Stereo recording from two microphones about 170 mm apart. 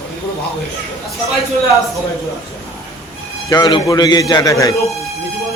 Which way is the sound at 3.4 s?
25° left (ahead or behind).